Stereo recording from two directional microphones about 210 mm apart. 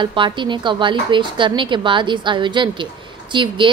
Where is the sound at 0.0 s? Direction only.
20° right (ahead or behind).